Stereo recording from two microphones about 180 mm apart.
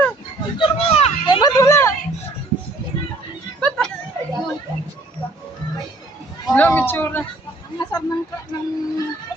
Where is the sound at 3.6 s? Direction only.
5° left (ahead or behind).